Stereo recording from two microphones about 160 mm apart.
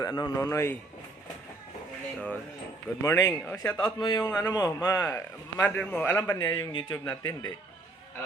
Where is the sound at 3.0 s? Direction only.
20° left (ahead or behind).